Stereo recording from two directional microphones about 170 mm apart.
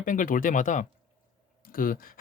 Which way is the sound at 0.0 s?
50° left (ahead or behind).